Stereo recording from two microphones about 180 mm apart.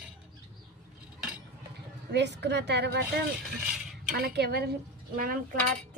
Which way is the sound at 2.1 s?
70° right (ahead or behind).